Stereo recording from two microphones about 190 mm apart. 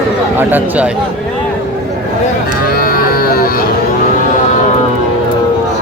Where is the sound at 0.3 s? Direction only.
10° right (ahead or behind).